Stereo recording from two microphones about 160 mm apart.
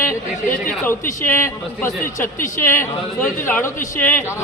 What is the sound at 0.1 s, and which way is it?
A man's voice, 15° left (ahead or behind).